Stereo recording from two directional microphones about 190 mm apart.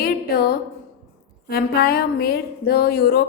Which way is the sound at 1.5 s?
55° left (ahead or behind).